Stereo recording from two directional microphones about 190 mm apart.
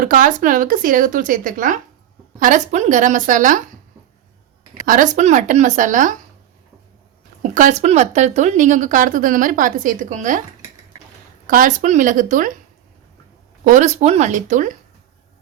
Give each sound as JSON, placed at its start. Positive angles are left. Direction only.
{"t": 0.0, "sound": "speech", "side_deg": -45}
{"t": 4.9, "sound": "speech", "side_deg": -40}
{"t": 7.5, "sound": "speech", "side_deg": -40}
{"t": 11.4, "sound": "speech", "side_deg": -45}
{"t": 13.7, "sound": "speech", "side_deg": -40}